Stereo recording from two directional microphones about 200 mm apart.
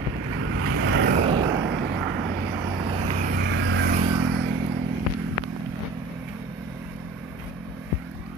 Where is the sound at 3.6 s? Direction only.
65° right (ahead or behind).